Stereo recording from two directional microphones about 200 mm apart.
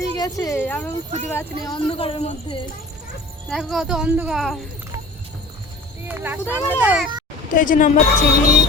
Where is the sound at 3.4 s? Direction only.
Centre (ahead or behind).